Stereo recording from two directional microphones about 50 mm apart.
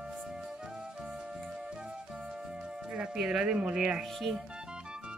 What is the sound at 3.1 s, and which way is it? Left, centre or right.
Speech, centre.